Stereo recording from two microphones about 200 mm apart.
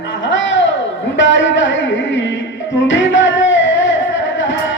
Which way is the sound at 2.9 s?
65° left (ahead or behind).